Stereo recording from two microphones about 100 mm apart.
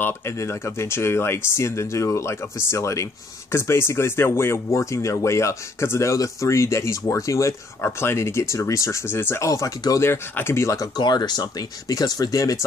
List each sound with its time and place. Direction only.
0.4 s speech: 25° left (ahead or behind)
9.5 s speech: 35° left (ahead or behind)
11.0 s speech: 45° left (ahead or behind)